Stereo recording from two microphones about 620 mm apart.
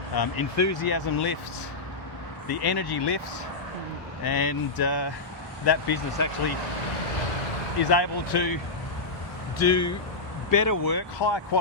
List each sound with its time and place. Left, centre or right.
0.2 s speech: left
2.5 s speech: left
4.2 s speech: left
7.9 s speech: left
9.6 s speech: left